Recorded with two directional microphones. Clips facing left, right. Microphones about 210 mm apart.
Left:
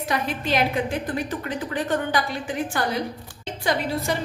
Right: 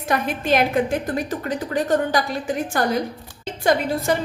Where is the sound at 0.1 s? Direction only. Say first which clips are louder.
Right 5 dB; 50° right (ahead or behind).